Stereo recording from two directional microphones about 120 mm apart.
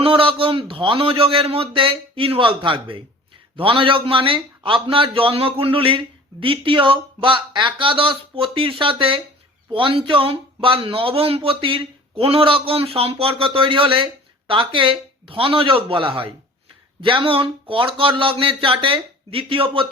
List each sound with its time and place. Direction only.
0.0 s speech: 45° right (ahead or behind)